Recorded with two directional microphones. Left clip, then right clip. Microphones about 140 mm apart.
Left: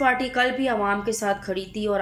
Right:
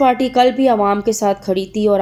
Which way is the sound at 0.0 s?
30° right (ahead or behind).